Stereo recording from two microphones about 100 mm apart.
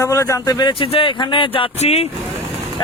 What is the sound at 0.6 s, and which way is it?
Speech, 60° left (ahead or behind).